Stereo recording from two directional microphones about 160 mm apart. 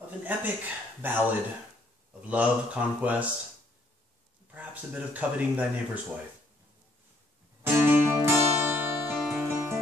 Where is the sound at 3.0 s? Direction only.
10° right (ahead or behind).